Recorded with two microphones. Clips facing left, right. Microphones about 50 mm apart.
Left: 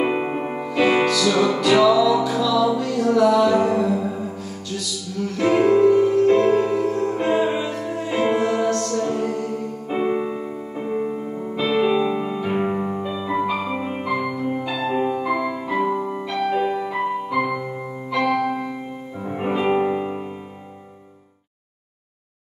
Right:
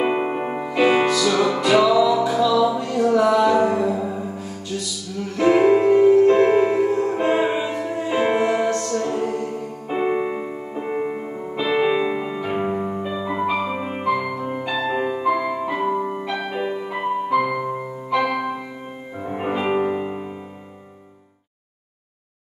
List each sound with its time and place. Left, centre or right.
0.0 s music: centre
1.3 s music: centre
1.6 s music: right
3.5 s music: centre
5.4 s music: centre
12.2 s music: centre
13.1 s music: centre
15.2 s music: centre